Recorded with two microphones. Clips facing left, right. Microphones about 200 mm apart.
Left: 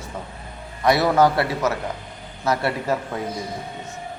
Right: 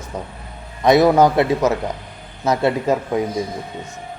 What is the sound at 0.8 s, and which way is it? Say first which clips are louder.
Speech: right 5 dB; 20° right (ahead or behind).